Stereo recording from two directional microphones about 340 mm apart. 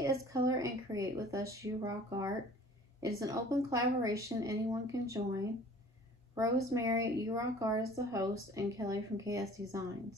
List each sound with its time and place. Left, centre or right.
0.0 s a woman's voice: centre